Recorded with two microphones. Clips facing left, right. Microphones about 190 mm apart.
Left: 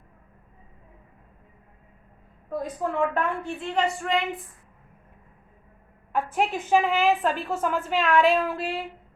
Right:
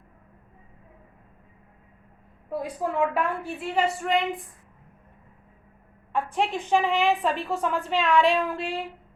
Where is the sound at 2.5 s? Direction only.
10° right (ahead or behind).